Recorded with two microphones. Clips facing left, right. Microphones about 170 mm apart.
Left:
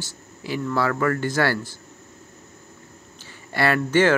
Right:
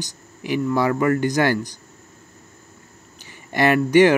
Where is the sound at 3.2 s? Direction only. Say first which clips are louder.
Right 4 dB; 15° right (ahead or behind).